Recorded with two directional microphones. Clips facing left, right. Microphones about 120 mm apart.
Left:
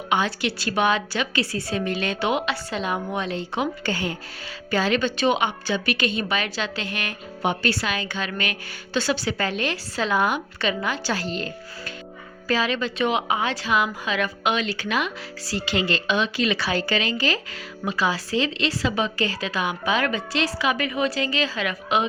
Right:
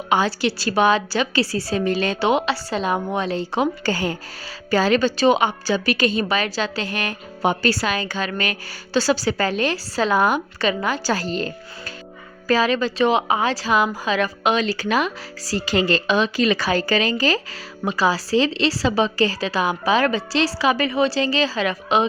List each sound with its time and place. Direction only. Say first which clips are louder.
0.1 s a woman's voice: right 4 dB; 35° right (ahead or behind)